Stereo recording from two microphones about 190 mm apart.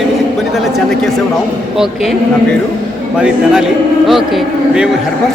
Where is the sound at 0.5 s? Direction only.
Centre (ahead or behind).